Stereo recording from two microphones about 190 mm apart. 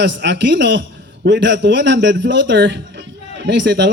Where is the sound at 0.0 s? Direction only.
65° right (ahead or behind).